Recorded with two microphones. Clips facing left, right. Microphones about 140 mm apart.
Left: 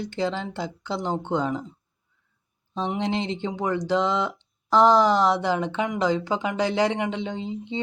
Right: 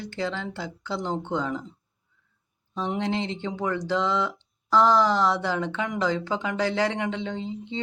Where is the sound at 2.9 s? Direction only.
20° left (ahead or behind).